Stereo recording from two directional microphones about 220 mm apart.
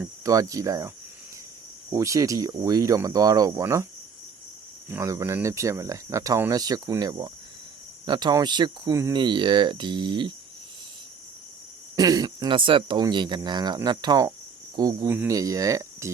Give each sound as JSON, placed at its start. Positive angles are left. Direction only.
{"t": 0.0, "sound": "speech", "side_deg": -15}
{"t": 4.9, "sound": "speech", "side_deg": -10}
{"t": 11.9, "sound": "speech", "side_deg": -15}